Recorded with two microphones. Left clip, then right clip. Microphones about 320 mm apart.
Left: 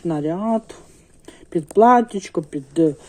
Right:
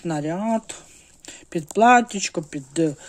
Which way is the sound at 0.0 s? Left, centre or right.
Right.